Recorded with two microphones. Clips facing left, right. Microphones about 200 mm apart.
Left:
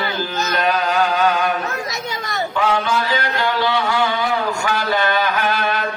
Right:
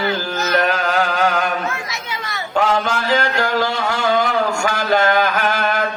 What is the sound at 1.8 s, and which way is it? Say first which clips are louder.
Children playing: left 3 dB; 40° left (ahead or behind).